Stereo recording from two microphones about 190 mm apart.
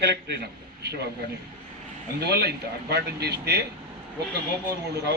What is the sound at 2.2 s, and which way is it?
Speech, 60° right (ahead or behind).